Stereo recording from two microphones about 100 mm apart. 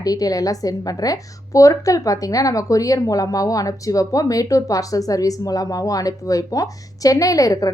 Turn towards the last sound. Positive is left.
turn(degrees=35)  # may be behind; listen again after turning